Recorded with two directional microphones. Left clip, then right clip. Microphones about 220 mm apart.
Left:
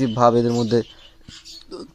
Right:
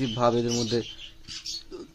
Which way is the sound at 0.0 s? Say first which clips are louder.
Left 8 dB; 30° left (ahead or behind).